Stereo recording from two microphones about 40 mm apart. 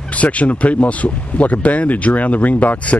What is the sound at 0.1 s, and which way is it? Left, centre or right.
Speech, left.